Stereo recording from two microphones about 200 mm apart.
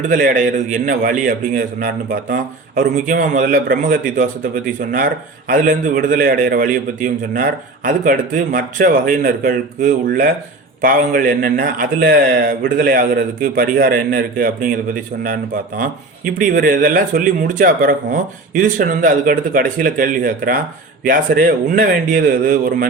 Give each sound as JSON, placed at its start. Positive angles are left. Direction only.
{"t": 0.0, "sound": "a man's voice", "side_deg": -40}
{"t": 16.4, "sound": "a man's voice", "side_deg": -45}